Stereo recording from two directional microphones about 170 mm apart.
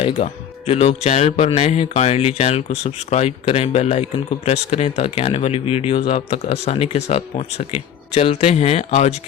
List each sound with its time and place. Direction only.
0.2 s speech: 35° left (ahead or behind)